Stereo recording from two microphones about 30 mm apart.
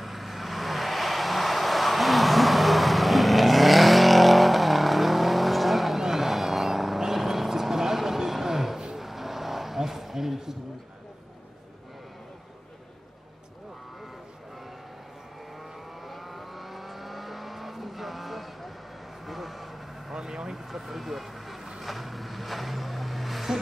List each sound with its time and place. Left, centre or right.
0.0 s vehicle: centre
5.9 s vehicle: centre
16.1 s vehicle: centre
20.2 s vehicle: centre
20.5 s vehicle: centre